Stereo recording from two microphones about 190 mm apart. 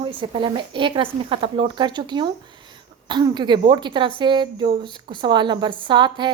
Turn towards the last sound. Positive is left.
turn(degrees=-25)  # may be behind; listen again after turning